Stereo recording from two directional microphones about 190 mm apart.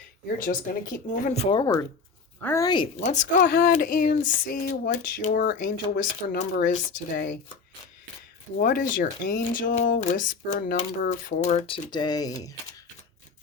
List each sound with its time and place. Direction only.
0.3 s speech: 45° left (ahead or behind); by 2.8 s 20° left (ahead or behind)
3.0 s speech: 40° left (ahead or behind)
8.6 s speech: 45° left (ahead or behind); by 12.5 s 20° left (ahead or behind)